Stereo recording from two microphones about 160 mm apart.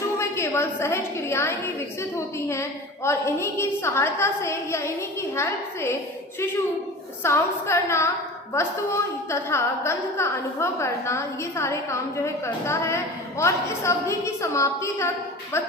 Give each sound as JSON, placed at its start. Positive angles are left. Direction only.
{"t": 0.2, "sound": "a woman's voice", "side_deg": 15}
{"t": 7.2, "sound": "a woman's voice", "side_deg": 15}